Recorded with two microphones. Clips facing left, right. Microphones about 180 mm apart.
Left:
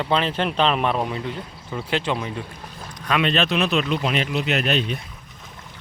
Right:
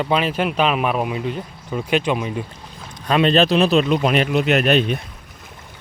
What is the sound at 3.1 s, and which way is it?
Speech, 35° right (ahead or behind).